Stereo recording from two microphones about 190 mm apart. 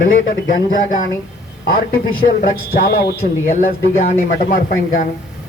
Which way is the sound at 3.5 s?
40° left (ahead or behind).